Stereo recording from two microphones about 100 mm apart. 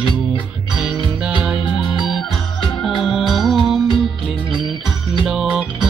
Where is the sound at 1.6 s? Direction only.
50° left (ahead or behind).